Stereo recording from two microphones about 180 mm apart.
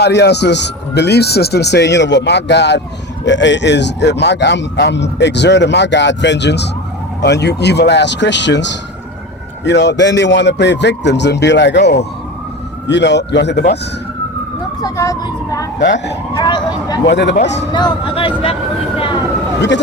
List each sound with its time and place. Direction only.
0.0 s speech: 70° left (ahead or behind)
3.2 s speech: 85° left; by 13.7 s 65° left (ahead or behind)
14.8 s speech: 20° left (ahead or behind)
15.8 s speech: 60° left (ahead or behind)
16.3 s speech: 25° left (ahead or behind)
17.1 s speech: 70° left (ahead or behind)
17.7 s speech: 25° left (ahead or behind)